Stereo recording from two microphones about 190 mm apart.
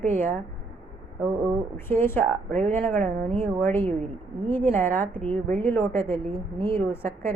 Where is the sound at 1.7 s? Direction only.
10° left (ahead or behind).